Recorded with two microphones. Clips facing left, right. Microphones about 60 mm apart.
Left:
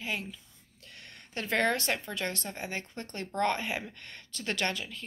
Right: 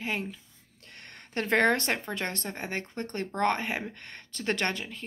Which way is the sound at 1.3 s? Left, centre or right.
Right.